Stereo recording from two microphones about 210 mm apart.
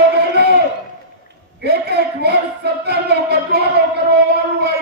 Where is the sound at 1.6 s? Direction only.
50° right (ahead or behind).